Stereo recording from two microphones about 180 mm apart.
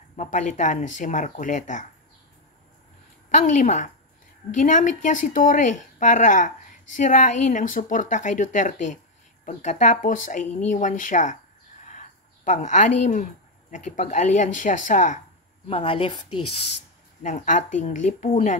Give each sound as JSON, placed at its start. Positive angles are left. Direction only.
{"t": 0.1, "sound": "speech", "side_deg": 40}
{"t": 3.3, "sound": "speech", "side_deg": 40}
{"t": 12.4, "sound": "speech", "side_deg": 40}
{"t": 15.7, "sound": "speech", "side_deg": 30}